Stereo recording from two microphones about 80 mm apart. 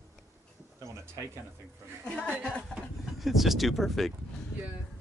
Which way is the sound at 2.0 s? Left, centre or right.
Centre.